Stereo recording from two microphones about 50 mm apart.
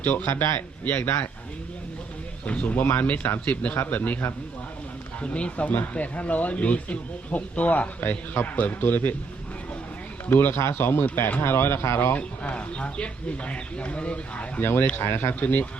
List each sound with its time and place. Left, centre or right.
0.0 s speech: left
2.5 s speech: left
2.8 s speech: left
5.2 s speech: left
10.2 s speech: left
11.4 s speech: left
12.1 s speech: left
14.6 s speech: left
15.4 s speech: left